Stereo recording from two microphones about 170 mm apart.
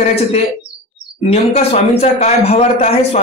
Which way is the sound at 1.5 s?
40° left (ahead or behind).